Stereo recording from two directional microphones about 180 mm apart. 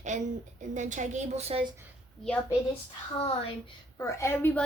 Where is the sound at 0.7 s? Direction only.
45° right (ahead or behind).